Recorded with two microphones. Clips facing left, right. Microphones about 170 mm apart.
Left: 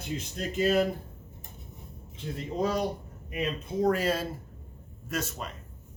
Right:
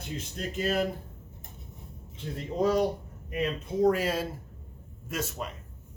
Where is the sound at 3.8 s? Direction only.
10° right (ahead or behind).